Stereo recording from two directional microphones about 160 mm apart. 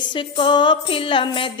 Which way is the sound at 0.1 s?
30° left (ahead or behind).